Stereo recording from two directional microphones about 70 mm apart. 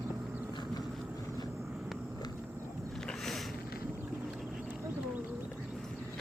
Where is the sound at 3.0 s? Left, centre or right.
Centre.